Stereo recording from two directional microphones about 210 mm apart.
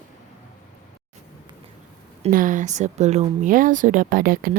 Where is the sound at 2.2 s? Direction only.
40° right (ahead or behind).